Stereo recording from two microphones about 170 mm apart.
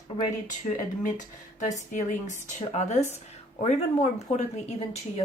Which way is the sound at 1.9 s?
45° left (ahead or behind).